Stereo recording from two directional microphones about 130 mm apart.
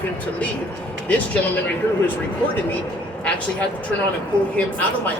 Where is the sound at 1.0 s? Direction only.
10° left (ahead or behind).